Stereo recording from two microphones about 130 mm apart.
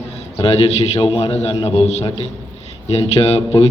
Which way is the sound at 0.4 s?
50° left (ahead or behind).